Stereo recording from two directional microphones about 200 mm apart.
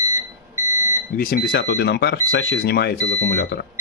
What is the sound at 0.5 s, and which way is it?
Alarm clock, 15° right (ahead or behind).